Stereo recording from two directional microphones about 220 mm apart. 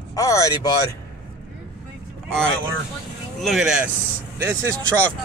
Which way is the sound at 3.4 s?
Centre (ahead or behind).